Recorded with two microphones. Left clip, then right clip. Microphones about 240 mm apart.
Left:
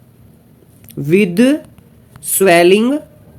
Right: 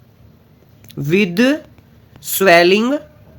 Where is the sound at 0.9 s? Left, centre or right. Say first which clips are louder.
Left 3 dB; centre.